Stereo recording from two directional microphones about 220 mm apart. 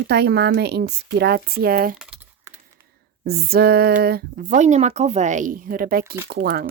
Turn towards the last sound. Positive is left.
turn(degrees=-45)  # may be behind; listen again after turning